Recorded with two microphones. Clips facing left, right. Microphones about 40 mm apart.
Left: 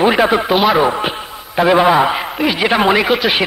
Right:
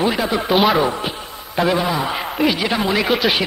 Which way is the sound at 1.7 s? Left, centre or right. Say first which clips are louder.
Left 10 dB; left.